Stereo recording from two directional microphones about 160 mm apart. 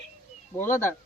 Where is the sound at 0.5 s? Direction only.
15° left (ahead or behind).